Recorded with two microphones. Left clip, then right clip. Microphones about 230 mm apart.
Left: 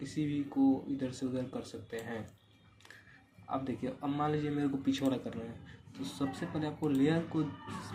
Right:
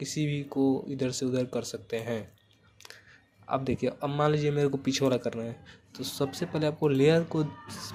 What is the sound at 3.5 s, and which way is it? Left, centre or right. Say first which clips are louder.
Speech: right 8 dB; right.